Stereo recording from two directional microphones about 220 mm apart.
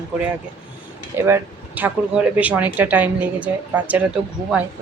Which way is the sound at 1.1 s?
10° right (ahead or behind).